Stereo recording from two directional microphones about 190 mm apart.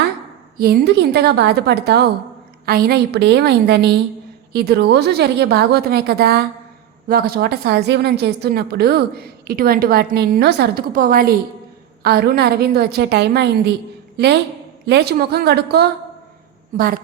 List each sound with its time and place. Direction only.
0.6 s a woman's voice: 55° right (ahead or behind)
14.8 s a woman's voice: 60° right (ahead or behind)